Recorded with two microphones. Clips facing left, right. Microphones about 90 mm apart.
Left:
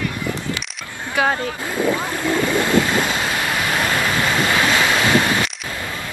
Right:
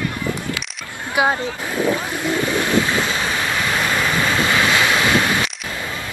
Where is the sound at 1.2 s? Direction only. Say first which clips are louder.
Right 1 dB; 20° right (ahead or behind).